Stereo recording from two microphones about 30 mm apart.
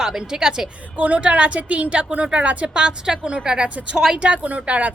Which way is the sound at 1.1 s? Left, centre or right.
Right.